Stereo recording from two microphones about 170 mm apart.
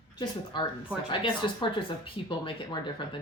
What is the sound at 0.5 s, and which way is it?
Speech, 30° left (ahead or behind).